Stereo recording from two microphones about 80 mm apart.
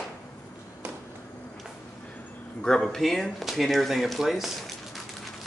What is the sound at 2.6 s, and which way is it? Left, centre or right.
Speech, centre.